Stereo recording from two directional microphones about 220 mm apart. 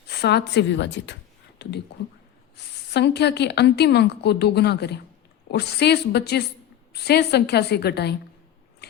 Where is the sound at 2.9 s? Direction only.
50° left (ahead or behind).